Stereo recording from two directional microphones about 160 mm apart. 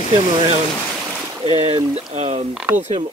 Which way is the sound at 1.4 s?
35° right (ahead or behind).